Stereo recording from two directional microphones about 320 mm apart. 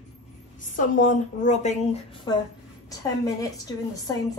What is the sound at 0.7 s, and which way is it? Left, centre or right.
A woman's voice, left.